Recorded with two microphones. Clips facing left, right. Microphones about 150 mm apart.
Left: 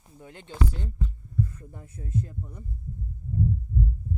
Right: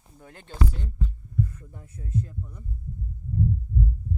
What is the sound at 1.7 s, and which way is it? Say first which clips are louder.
Speech: even; 30° left (ahead or behind).